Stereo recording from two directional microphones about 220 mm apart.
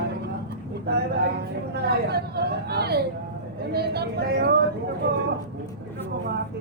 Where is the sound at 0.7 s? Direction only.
50° right (ahead or behind).